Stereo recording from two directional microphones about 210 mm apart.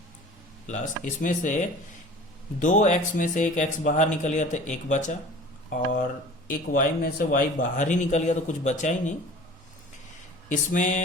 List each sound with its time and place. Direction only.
0.7 s a man's voice: 35° left (ahead or behind)
6.5 s a man's voice: 40° left (ahead or behind)
10.5 s a man's voice: 35° left (ahead or behind)